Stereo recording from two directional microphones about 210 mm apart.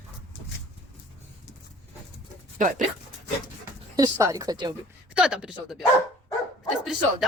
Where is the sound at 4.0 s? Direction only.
15° right (ahead or behind).